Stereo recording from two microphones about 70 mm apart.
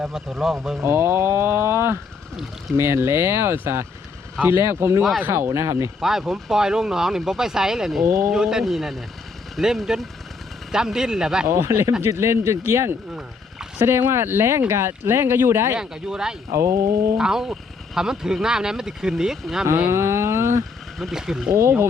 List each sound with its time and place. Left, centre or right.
0.3 s speech: centre
0.8 s speech: right
6.0 s speech: centre
8.0 s speech: right
8.3 s speech: centre
11.4 s speech: right
15.7 s speech: centre
16.5 s speech: right
17.2 s speech: centre
19.9 s a sound: right
21.0 s speech: centre